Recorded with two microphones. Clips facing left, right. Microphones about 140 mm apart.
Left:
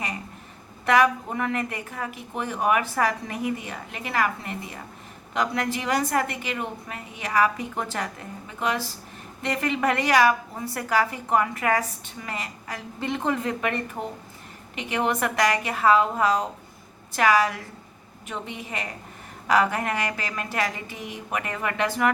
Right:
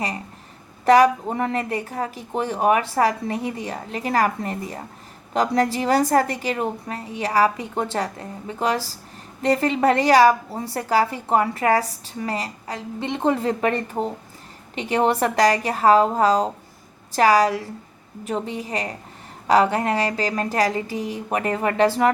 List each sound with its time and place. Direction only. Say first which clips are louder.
0.9 s a woman's voice: right 6 dB; 35° right (ahead or behind)